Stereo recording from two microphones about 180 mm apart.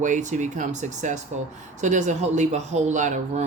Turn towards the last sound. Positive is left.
turn(degrees=-45)  # may be behind; listen again after turning